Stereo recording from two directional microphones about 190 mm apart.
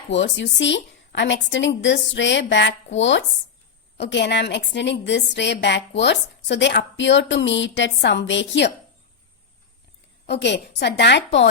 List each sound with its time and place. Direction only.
0.1 s a woman's voice: 70° left (ahead or behind)
10.4 s a woman's voice: 65° left (ahead or behind)